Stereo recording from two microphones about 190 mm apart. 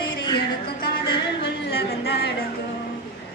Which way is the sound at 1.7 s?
55° left (ahead or behind).